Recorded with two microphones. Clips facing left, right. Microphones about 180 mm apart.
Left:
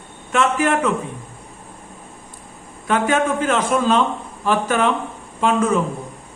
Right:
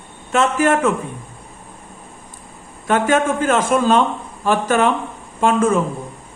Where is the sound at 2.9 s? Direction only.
45° right (ahead or behind).